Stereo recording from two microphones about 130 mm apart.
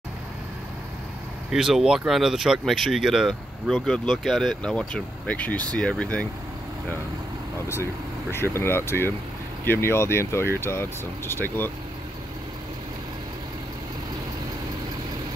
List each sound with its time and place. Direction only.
1.5 s speech: 5° right (ahead or behind)
7.6 s speech: 20° left (ahead or behind)